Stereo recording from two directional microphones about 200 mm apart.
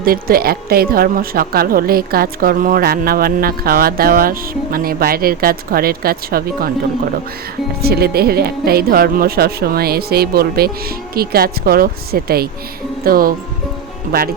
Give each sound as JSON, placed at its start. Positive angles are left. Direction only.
{"t": 0.0, "sound": "speech", "side_deg": -45}
{"t": 7.8, "sound": "speech", "side_deg": -50}